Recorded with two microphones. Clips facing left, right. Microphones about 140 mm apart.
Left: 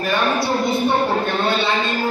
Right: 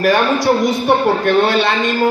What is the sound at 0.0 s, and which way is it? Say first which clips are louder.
A man's voice: right 6 dB; 85° right.